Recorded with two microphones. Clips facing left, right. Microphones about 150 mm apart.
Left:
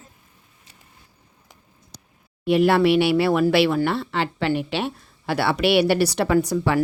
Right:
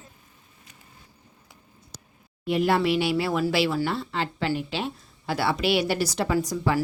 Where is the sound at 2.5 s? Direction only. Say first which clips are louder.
Left 6 dB; 70° left (ahead or behind).